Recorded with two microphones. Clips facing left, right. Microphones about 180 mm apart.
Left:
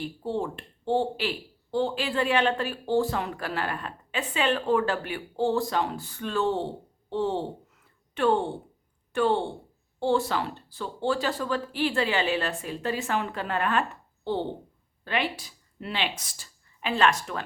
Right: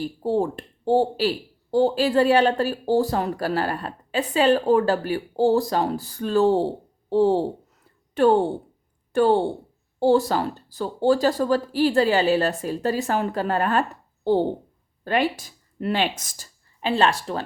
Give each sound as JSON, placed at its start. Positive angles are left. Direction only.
{"t": 0.0, "sound": "speech", "side_deg": -40}
{"t": 16.8, "sound": "speech", "side_deg": -30}